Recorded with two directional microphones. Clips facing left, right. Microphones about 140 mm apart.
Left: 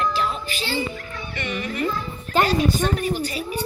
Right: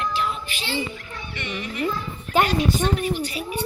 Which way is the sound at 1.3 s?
45° left (ahead or behind).